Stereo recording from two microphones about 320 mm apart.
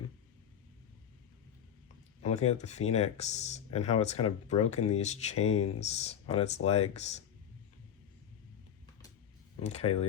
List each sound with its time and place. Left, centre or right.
2.2 s speech: centre
9.6 s speech: centre